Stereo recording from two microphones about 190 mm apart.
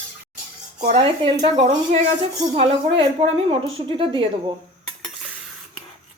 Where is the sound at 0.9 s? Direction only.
25° right (ahead or behind).